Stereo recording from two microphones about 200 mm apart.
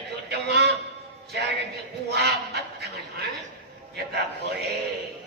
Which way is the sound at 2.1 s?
55° right (ahead or behind).